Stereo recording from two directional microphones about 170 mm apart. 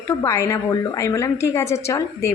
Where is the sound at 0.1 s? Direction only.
15° left (ahead or behind).